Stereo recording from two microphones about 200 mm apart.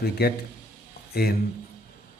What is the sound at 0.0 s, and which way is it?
Speech, 50° left (ahead or behind).